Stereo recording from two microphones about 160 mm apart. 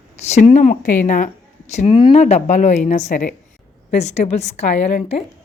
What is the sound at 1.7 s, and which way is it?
A woman's voice, 40° left (ahead or behind).